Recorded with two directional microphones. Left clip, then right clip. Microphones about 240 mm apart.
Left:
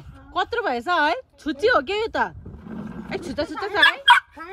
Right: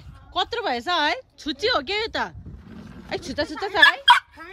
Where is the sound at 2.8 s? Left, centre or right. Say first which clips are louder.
Left 8 dB; left.